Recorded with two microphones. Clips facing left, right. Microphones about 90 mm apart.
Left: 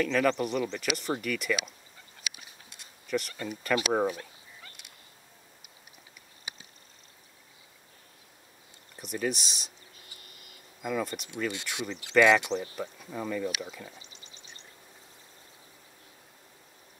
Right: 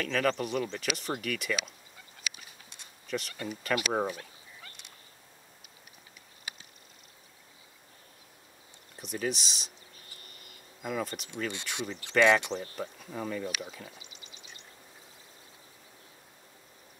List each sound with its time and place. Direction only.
0.0 s speech: 5° left (ahead or behind)
3.1 s speech: centre (ahead or behind)
8.9 s speech: centre (ahead or behind)
10.8 s speech: centre (ahead or behind)
14.0 s a sound: 35° left (ahead or behind)